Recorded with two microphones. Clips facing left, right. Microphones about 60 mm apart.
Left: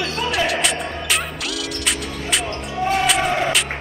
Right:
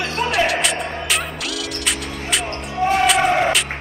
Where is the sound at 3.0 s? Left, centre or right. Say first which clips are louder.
Right 5 dB; centre.